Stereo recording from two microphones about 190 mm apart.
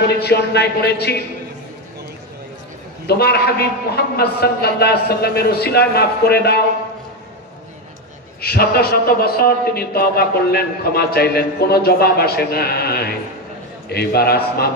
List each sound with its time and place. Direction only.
0.1 s a man's voice: 60° left (ahead or behind)
3.1 s a man's voice: 55° left (ahead or behind)
8.4 s a man's voice: 55° left (ahead or behind)